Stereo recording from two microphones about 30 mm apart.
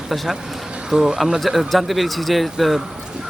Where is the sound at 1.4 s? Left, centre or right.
Centre.